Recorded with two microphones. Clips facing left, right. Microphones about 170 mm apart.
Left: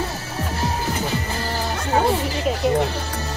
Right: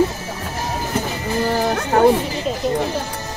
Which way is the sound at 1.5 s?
55° right (ahead or behind).